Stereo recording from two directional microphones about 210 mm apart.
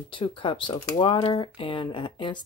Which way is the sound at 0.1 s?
25° left (ahead or behind).